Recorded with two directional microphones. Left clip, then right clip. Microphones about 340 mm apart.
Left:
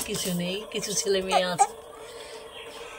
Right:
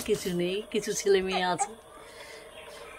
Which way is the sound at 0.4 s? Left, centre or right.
Centre.